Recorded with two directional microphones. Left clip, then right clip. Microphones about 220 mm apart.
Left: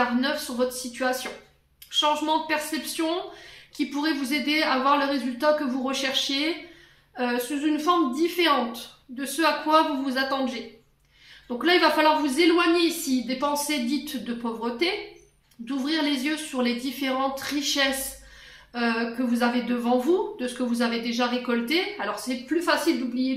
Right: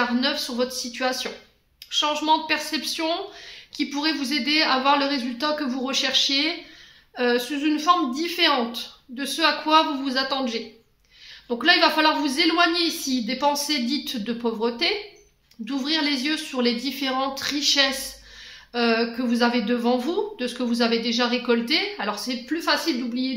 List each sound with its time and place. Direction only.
0.2 s a woman's voice: 40° right (ahead or behind)